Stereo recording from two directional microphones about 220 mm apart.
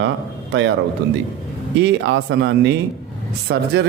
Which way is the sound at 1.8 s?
55° right (ahead or behind).